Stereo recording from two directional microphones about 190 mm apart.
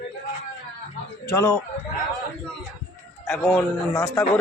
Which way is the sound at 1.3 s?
10° left (ahead or behind).